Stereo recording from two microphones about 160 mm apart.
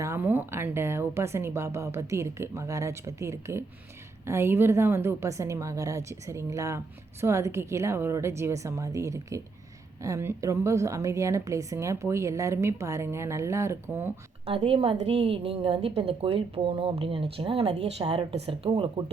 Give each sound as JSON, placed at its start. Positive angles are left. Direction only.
{"t": 0.0, "sound": "a woman's voice", "side_deg": -15}
{"t": 14.4, "sound": "a woman's voice", "side_deg": -35}